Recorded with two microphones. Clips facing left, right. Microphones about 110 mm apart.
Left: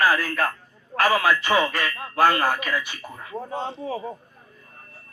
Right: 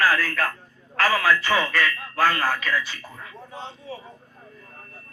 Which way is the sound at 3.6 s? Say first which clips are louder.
Left 4 dB; 45° left (ahead or behind).